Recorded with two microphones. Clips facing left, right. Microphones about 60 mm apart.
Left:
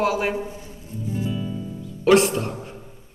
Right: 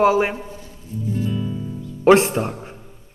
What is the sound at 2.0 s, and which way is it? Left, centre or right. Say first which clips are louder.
Speech: right 3 dB; right.